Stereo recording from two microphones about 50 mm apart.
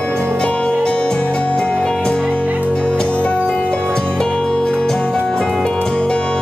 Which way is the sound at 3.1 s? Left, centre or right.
Left.